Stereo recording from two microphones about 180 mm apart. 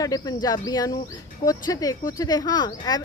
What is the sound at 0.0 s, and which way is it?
A woman's voice, 20° left (ahead or behind).